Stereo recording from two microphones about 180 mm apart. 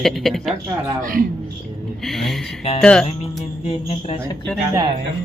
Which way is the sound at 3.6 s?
30° left (ahead or behind).